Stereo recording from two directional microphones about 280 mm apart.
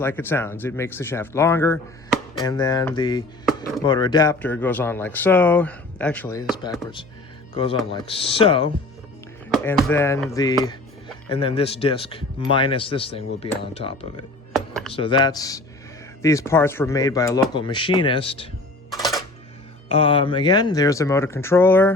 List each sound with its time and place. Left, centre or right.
0.0 s speech: centre
7.5 s speech: centre
9.5 s speech: centre
19.9 s speech: centre